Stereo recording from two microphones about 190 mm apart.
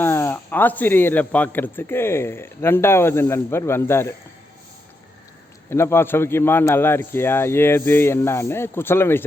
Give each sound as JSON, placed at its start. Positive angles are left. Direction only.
{"t": 0.0, "sound": "a man's voice", "side_deg": 10}
{"t": 5.7, "sound": "a man's voice", "side_deg": 15}